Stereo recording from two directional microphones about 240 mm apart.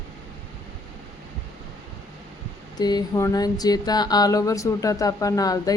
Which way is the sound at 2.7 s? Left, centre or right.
Centre.